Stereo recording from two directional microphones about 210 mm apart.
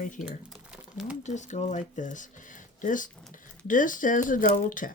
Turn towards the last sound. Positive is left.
turn(degrees=40)  # may be behind; listen again after turning